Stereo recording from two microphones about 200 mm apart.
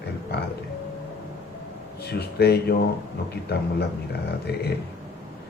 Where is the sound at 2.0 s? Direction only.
55° left (ahead or behind).